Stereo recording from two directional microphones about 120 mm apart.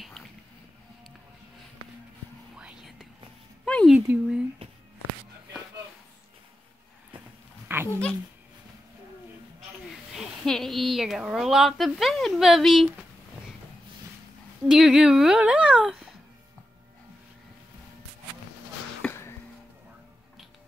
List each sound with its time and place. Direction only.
2.5 s whispering: 5° right (ahead or behind)
3.6 s a sound: 5° left (ahead or behind)
3.9 s speech: 10° right (ahead or behind)
7.6 s dog: 20° right (ahead or behind)
10.1 s a woman's voice: 5° left (ahead or behind)
14.7 s a woman's voice: 5° right (ahead or behind)
19.0 s a sound: 10° left (ahead or behind)